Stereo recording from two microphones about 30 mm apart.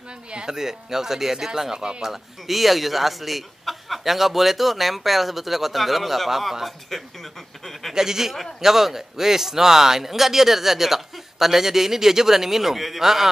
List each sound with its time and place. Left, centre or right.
0.5 s speech: centre
2.0 s speech: centre
7.9 s speech: centre